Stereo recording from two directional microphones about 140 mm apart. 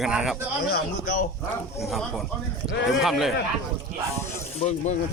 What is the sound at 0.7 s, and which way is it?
Speech, 80° left.